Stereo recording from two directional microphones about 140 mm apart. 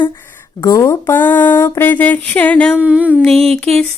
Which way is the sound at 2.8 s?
10° right (ahead or behind).